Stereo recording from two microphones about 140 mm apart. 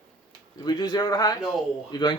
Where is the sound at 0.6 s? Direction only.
30° left (ahead or behind).